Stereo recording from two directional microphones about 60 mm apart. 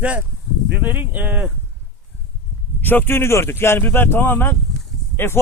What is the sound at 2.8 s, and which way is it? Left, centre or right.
A man's voice, left.